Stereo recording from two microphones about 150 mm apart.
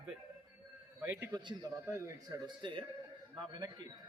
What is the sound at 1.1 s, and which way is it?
Speech, 25° right (ahead or behind).